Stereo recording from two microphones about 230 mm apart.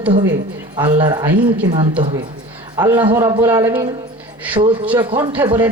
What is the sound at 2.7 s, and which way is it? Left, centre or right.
Speech, centre.